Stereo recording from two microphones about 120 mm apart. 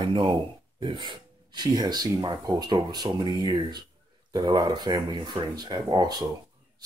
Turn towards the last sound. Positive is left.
turn(degrees=-35)  # may be behind; listen again after turning